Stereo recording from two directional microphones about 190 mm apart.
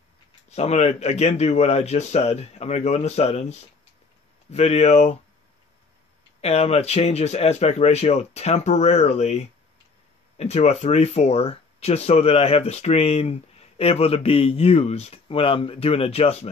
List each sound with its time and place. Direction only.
0.5 s speech: 35° left (ahead or behind)
6.4 s speech: 35° left (ahead or behind)